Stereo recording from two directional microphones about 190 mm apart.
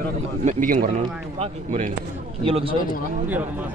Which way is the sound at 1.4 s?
35° right (ahead or behind).